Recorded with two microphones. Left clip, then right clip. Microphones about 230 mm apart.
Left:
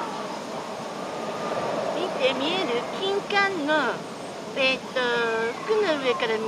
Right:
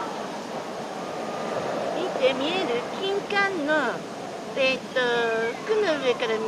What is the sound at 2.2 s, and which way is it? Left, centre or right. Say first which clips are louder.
Speech: right 1 dB; centre.